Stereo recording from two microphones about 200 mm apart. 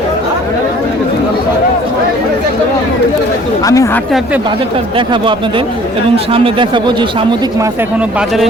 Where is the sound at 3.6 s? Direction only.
15° left (ahead or behind).